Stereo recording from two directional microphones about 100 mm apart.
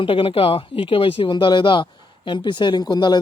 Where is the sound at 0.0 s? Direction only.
60° left (ahead or behind).